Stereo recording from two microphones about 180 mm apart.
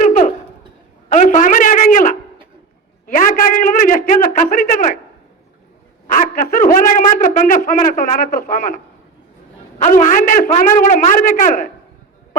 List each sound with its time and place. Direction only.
0.0 s a sound: 45° left (ahead or behind)
3.1 s a man's voice: 50° left (ahead or behind)
6.1 s a man's voice: 50° left (ahead or behind)